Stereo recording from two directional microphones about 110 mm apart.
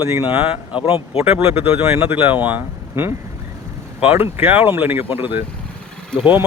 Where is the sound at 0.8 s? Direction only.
55° left (ahead or behind).